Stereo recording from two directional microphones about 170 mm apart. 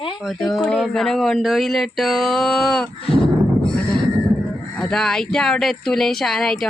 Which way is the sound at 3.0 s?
30° left (ahead or behind).